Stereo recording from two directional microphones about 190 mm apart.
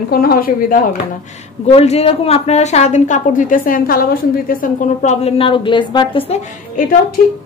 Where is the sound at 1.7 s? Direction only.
35° left (ahead or behind).